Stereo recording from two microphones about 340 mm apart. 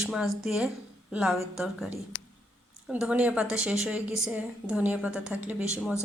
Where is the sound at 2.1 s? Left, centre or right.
Left.